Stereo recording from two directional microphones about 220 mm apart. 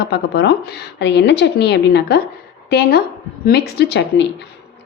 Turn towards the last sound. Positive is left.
turn(degrees=50)  # may be behind; listen again after turning